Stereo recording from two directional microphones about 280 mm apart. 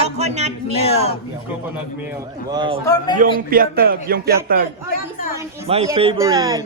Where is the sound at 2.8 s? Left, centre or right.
Centre.